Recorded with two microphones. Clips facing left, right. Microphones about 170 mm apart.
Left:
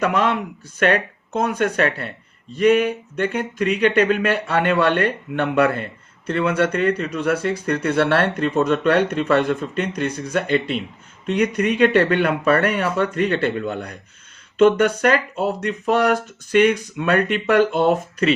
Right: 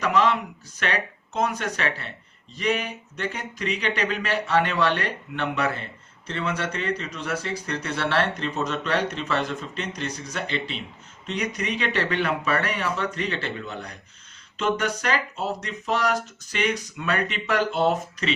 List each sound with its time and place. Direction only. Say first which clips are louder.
0.0 s speech: left 2 dB; 55° left (ahead or behind)